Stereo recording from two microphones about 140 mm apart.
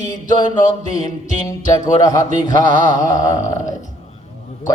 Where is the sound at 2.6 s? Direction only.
30° left (ahead or behind).